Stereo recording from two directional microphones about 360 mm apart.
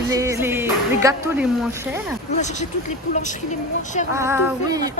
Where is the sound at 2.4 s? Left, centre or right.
Centre.